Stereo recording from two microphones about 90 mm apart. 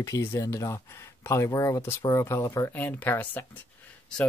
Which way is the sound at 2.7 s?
20° left (ahead or behind).